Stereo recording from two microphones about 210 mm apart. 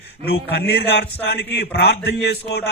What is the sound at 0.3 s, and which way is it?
A man's voice, 50° left (ahead or behind).